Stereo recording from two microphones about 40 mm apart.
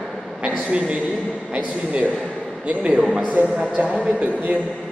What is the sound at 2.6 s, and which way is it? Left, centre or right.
A man's voice, right.